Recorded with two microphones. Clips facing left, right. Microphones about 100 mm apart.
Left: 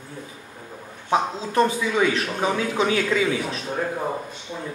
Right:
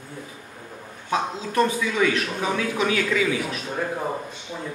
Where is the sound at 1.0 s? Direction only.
30° left (ahead or behind).